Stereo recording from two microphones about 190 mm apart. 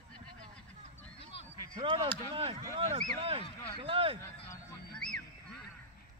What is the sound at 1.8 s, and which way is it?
Speech, 20° right (ahead or behind).